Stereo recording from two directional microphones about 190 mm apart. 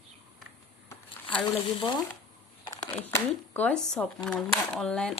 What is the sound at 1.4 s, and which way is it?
Speech, 25° left (ahead or behind).